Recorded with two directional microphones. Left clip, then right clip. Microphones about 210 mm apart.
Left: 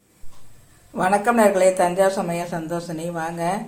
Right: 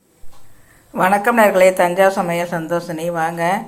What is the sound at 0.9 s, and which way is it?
Speech, 10° right (ahead or behind).